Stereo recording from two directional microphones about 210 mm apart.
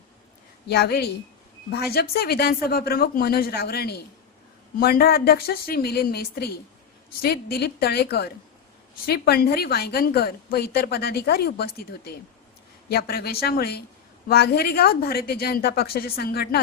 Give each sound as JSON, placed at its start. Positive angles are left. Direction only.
{"t": 0.7, "sound": "a woman's voice", "side_deg": 50}